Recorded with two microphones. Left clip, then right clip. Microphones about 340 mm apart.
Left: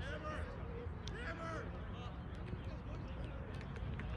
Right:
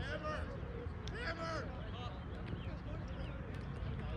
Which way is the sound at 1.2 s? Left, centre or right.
Centre.